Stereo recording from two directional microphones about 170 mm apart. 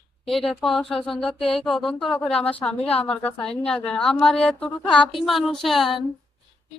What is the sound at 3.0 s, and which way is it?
Speech, 35° left (ahead or behind).